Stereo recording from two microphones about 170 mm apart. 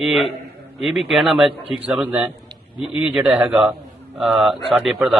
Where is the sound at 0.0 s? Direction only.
Centre (ahead or behind).